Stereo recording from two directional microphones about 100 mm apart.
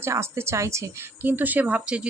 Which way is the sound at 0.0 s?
25° right (ahead or behind).